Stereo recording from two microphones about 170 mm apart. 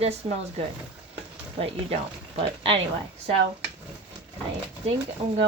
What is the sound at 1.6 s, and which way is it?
Speech, 35° right (ahead or behind).